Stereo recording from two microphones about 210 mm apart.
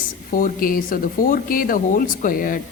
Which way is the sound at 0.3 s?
40° left (ahead or behind).